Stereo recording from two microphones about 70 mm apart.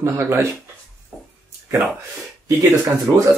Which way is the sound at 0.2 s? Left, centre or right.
Right.